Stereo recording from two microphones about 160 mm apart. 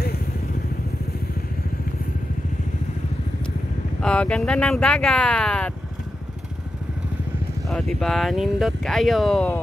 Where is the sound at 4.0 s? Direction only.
5° left (ahead or behind).